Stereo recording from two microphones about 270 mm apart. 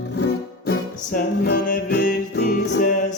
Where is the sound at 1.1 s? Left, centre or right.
Left.